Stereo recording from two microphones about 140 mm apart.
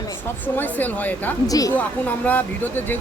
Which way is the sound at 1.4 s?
25° left (ahead or behind).